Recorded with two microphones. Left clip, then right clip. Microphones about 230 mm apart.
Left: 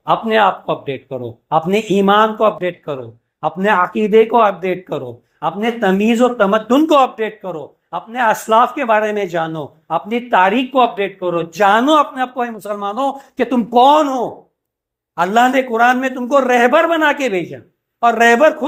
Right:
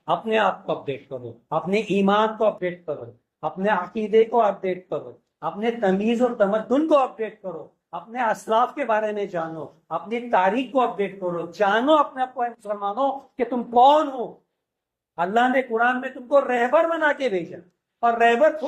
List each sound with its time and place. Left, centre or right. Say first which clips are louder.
0.1 s a man's voice: left 8 dB; left
15.1 s a man's voice: left 7 dB; left